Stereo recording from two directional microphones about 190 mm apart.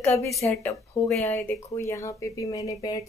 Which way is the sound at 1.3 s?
10° left (ahead or behind).